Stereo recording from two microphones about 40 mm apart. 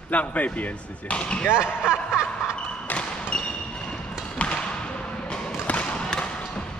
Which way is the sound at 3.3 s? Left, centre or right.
Left.